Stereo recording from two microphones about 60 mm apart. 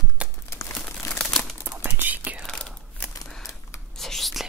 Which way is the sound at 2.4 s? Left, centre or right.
Centre.